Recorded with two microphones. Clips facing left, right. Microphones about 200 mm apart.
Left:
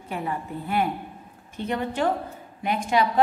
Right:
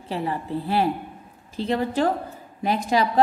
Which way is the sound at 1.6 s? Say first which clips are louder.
Right 3 dB; 35° right (ahead or behind).